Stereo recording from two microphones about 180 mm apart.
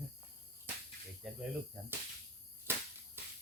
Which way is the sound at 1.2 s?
Centre (ahead or behind).